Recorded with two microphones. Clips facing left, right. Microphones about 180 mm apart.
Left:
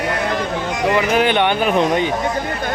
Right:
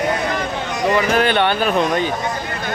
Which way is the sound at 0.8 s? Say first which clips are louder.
Even; 10° left (ahead or behind).